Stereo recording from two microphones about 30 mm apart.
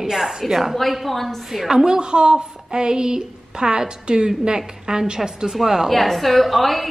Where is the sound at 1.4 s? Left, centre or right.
Centre.